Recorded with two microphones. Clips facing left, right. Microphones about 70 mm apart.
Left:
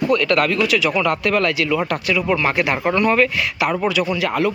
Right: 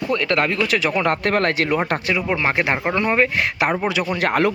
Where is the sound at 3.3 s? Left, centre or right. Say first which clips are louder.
Even; right.